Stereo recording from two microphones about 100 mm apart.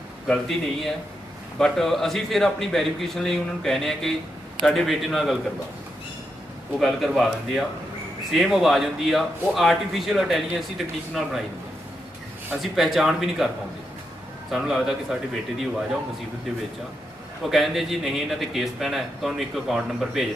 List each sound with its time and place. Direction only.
0.3 s a man's voice: 5° left (ahead or behind)
6.7 s a man's voice: centre (ahead or behind)
12.7 s a man's voice: centre (ahead or behind)
14.5 s a man's voice: centre (ahead or behind)
17.4 s a man's voice: centre (ahead or behind)